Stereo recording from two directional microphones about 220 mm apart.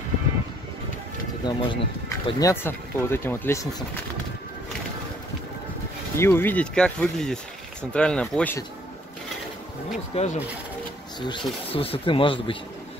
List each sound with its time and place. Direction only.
1.4 s speech: 20° left (ahead or behind)
6.1 s speech: 10° left (ahead or behind)
10.1 s speech: 30° left (ahead or behind)
11.1 s speech: 20° left (ahead or behind)